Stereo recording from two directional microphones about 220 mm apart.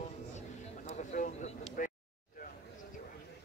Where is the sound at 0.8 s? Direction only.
30° left (ahead or behind).